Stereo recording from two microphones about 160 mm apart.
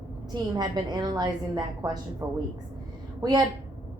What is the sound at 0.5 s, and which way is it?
A woman's voice, 25° right (ahead or behind).